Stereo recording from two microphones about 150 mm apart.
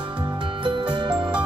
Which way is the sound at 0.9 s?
30° right (ahead or behind).